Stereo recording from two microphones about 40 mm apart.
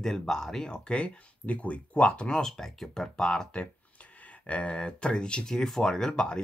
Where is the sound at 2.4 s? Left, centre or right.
Centre.